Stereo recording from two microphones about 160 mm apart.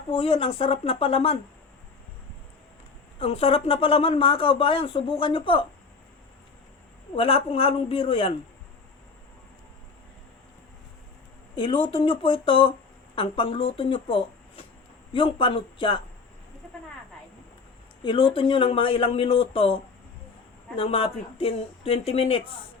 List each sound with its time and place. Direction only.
0.1 s speech: 35° left (ahead or behind)
3.2 s speech: 40° left (ahead or behind)
7.2 s speech: 35° left (ahead or behind)
11.5 s speech: 30° left (ahead or behind)
18.0 s speech: 30° left (ahead or behind)